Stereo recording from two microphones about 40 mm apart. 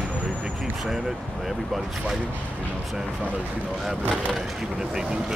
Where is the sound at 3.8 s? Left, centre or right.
Centre.